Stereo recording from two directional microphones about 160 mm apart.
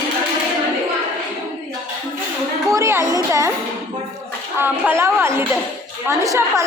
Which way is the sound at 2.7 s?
20° right (ahead or behind).